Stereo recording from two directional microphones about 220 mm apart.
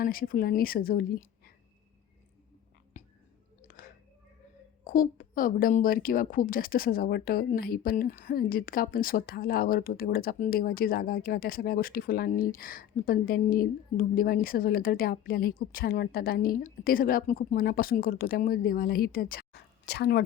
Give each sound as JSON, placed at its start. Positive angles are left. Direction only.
{"t": 0.0, "sound": "a woman's voice", "side_deg": 40}
{"t": 3.0, "sound": "whispering", "side_deg": 30}
{"t": 4.8, "sound": "a woman's voice", "side_deg": 40}